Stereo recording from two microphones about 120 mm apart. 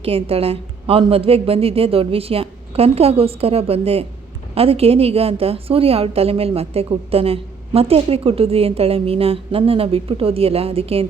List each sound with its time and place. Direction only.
0.0 s a woman's voice: 55° right (ahead or behind)